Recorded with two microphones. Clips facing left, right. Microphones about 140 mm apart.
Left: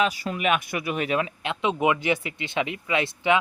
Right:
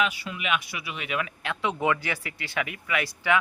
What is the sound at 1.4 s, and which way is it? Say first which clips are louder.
Speech: left 3 dB; 20° left (ahead or behind).